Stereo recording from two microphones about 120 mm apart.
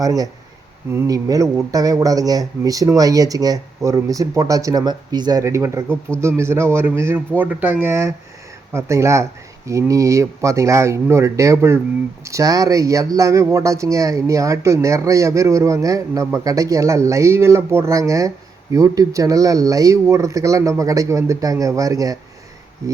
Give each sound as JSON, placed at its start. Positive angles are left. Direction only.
{"t": 0.0, "sound": "speech", "side_deg": -30}